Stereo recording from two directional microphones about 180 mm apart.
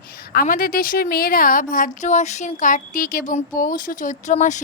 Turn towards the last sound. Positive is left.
turn(degrees=40)  # may be behind; listen again after turning